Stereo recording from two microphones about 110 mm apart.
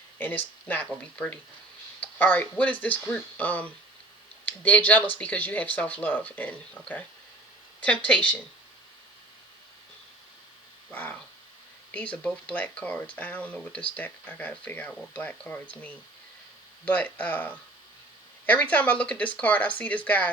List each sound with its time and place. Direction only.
0.2 s speech: 15° left (ahead or behind)
10.9 s speech: 15° left (ahead or behind)